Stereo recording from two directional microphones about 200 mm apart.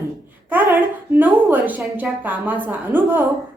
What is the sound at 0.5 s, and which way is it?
A woman's voice, 10° right (ahead or behind).